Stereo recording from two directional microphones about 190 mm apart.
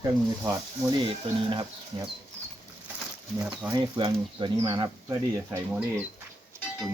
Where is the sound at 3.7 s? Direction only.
25° right (ahead or behind).